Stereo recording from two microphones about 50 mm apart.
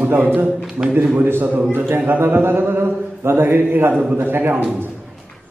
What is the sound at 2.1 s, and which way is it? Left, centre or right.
Mantra, right.